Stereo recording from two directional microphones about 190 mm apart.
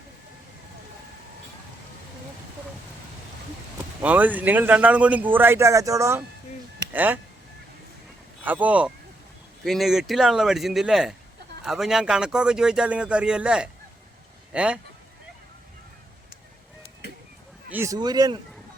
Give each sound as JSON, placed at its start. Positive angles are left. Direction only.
{"t": 4.0, "sound": "a man's voice", "side_deg": -10}
{"t": 8.4, "sound": "a man's voice", "side_deg": -10}
{"t": 17.7, "sound": "speech", "side_deg": -15}